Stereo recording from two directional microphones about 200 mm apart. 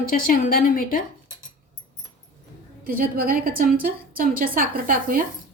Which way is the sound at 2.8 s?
45° right (ahead or behind).